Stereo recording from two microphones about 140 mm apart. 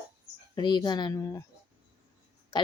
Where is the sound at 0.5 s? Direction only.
30° left (ahead or behind).